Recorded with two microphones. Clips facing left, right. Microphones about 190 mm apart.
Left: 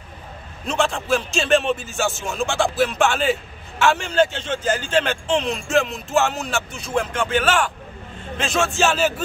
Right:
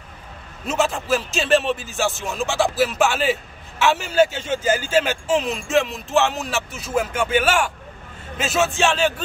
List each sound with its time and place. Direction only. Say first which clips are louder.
0.7 s speech: even; 5° right (ahead or behind)